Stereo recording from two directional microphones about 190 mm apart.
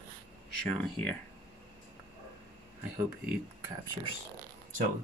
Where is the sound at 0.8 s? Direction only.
5° left (ahead or behind).